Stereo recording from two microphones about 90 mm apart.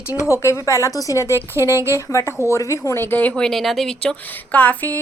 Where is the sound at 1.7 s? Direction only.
35° right (ahead or behind).